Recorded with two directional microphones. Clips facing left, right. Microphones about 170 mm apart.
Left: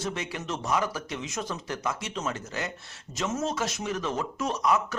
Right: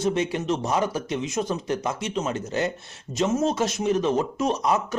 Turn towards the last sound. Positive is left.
turn(degrees=-20)  # may be behind; listen again after turning